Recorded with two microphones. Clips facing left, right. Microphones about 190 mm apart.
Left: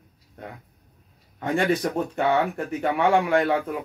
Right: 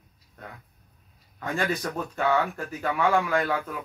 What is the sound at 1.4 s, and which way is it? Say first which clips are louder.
Speech: left 6 dB; 25° left (ahead or behind).